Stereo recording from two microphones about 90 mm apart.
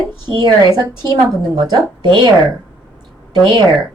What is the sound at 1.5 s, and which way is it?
Speech, 60° right (ahead or behind).